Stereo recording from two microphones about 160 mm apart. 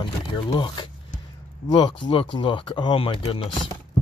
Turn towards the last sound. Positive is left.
turn(degrees=30)  # may be behind; listen again after turning